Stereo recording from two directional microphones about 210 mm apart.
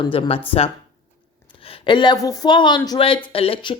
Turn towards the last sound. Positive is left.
turn(degrees=25)  # may be behind; listen again after turning